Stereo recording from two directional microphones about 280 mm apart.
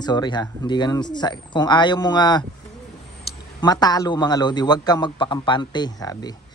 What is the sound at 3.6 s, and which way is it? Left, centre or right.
Speech, centre.